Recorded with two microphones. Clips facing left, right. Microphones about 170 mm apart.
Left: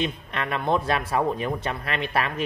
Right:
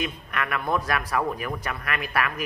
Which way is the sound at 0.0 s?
25° left (ahead or behind).